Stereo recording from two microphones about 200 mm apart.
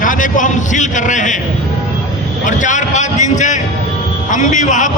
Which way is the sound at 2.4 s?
40° left (ahead or behind).